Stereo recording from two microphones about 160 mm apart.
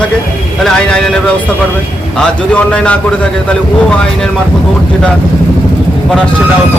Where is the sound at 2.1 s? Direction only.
5° left (ahead or behind).